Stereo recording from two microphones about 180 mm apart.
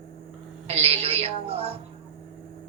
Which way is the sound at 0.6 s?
30° right (ahead or behind).